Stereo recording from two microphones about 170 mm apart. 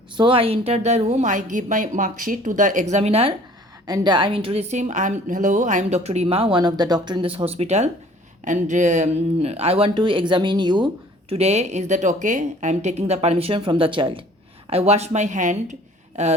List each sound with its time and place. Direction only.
0.2 s a woman's voice: 30° right (ahead or behind)
3.8 s a woman's voice: 25° right (ahead or behind)
11.3 s a woman's voice: 40° right (ahead or behind)